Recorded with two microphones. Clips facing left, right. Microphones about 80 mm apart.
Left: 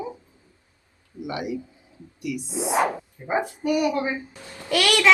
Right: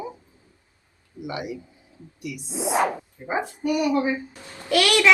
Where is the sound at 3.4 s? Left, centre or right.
Left.